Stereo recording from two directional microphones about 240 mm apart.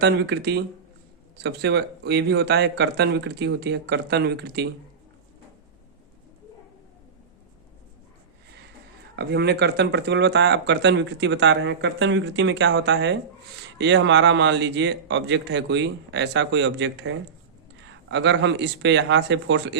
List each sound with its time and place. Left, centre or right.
0.0 s speech: right
9.1 s speech: right